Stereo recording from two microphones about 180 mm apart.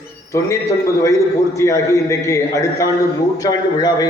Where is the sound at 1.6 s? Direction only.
15° left (ahead or behind).